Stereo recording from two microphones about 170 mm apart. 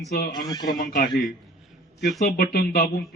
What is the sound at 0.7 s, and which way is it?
Speech, 55° left (ahead or behind).